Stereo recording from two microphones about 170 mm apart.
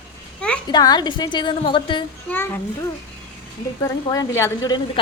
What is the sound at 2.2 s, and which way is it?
Speech, 10° left (ahead or behind).